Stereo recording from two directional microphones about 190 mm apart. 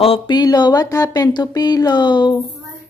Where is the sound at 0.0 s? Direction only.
25° left (ahead or behind).